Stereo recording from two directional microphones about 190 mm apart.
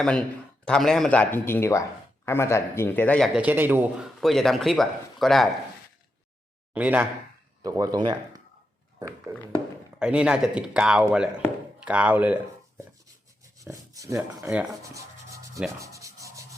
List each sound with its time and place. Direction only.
0.0 s speech: 5° left (ahead or behind)
3.3 s a man's voice: 10° right (ahead or behind)
4.2 s speech: centre (ahead or behind)
6.7 s a man's voice: 10° right (ahead or behind)
7.6 s a man's voice: 20° right (ahead or behind)
13.6 s filing: 15° right (ahead or behind)
14.5 s speech: 5° right (ahead or behind)
14.9 s rub: 15° right (ahead or behind)